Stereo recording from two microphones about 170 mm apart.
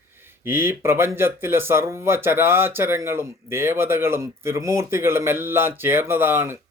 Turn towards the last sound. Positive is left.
turn(degrees=-15)  # may be behind; listen again after turning